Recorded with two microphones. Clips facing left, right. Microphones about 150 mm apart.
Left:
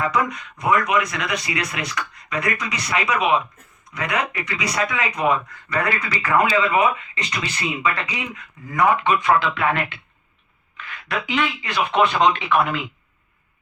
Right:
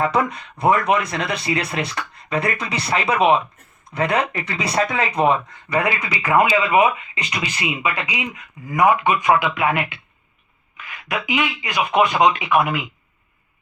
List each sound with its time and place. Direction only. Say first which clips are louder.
0.0 s speech: right 2 dB; 30° right (ahead or behind); by 12.8 s 10° right (ahead or behind)